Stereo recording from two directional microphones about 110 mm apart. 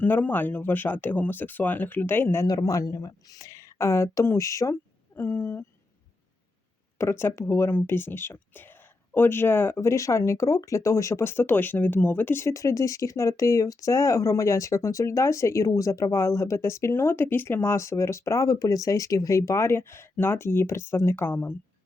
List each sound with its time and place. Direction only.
0.0 s speech: 15° left (ahead or behind)
2.5 s speech: 35° left (ahead or behind)
7.0 s speech: 25° left (ahead or behind)